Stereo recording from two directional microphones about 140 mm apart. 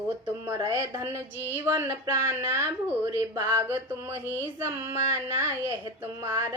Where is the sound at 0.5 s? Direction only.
25° right (ahead or behind).